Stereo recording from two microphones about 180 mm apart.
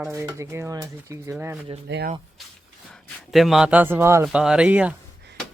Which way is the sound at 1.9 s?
70° right (ahead or behind).